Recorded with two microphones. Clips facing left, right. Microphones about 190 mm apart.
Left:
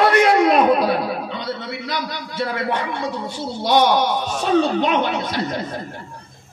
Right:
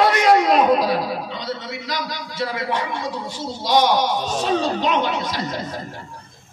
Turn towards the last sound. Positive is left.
turn(degrees=55)  # may be behind; listen again after turning